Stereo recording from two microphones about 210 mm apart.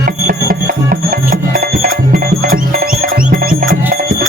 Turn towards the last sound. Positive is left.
turn(degrees=-45)  # may be behind; listen again after turning